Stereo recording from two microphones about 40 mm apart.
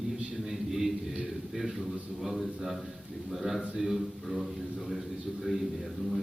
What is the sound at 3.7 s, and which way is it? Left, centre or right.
Speech, centre.